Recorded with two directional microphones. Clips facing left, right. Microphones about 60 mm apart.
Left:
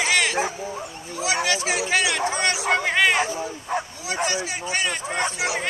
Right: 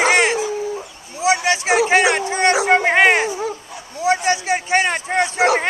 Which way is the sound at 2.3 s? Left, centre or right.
Right.